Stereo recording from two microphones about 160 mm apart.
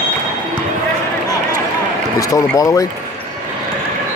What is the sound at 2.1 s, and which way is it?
Speech, 20° left (ahead or behind).